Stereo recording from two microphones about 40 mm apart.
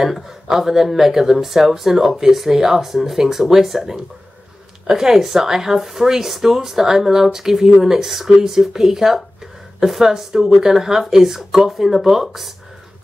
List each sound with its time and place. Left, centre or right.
0.0 s speech: centre